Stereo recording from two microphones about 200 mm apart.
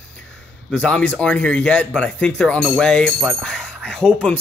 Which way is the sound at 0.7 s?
5° left (ahead or behind).